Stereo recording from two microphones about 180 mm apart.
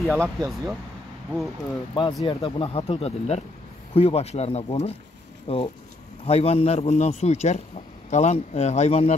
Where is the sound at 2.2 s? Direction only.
30° left (ahead or behind).